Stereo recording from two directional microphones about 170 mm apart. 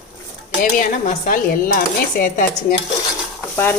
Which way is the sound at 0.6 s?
50° left (ahead or behind).